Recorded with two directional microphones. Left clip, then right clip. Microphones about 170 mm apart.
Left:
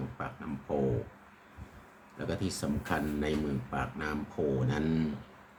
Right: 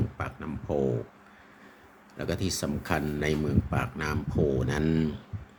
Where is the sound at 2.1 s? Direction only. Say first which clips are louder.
Right 4 dB; 50° right (ahead or behind).